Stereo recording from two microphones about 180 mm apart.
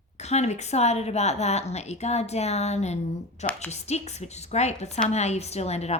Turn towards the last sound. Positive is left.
turn(degrees=35)  # may be behind; listen again after turning